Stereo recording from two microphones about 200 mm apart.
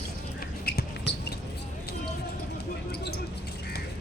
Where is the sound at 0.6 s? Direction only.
55° left (ahead or behind).